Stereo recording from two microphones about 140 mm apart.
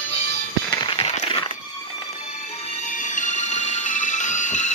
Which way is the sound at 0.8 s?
40° left (ahead or behind).